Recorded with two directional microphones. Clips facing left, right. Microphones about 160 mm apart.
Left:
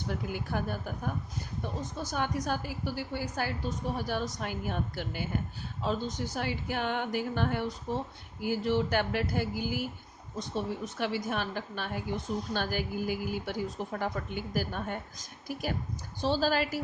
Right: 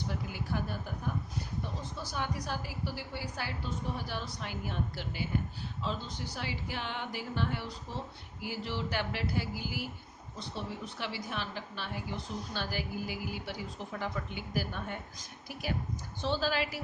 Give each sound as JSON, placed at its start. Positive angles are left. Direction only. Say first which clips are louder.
{"t": 0.3, "sound": "a woman's voice", "louder": "left 3 dB", "side_deg": 50}
{"t": 1.8, "sound": "a woman's voice", "louder": "left 8 dB", "side_deg": 45}